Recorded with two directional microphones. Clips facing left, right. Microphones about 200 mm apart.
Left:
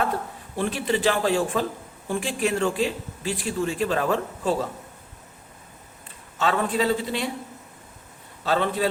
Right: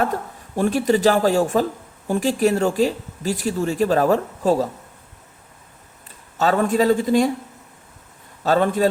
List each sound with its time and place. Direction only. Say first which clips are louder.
0.0 s a man's voice: right 3 dB; 45° right (ahead or behind)
6.3 s a man's voice: right 5 dB; 40° right (ahead or behind)
8.4 s a man's voice: right 6 dB; 45° right (ahead or behind)